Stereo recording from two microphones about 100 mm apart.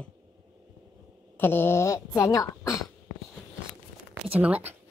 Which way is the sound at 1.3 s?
20° left (ahead or behind).